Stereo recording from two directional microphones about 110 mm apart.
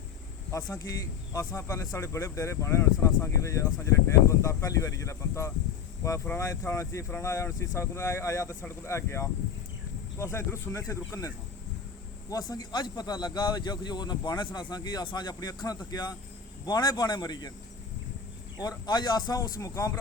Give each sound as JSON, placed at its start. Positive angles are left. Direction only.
{"t": 0.5, "sound": "a man's voice", "side_deg": 30}
{"t": 18.5, "sound": "a man's voice", "side_deg": 40}